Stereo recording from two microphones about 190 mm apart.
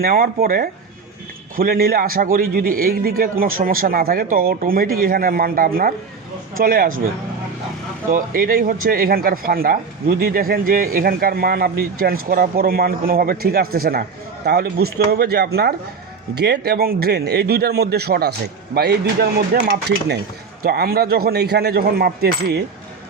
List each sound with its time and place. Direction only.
0.0 s speech: 55° right (ahead or behind)
8.1 s speech: 50° right (ahead or behind)
20.6 s speech: 55° right (ahead or behind)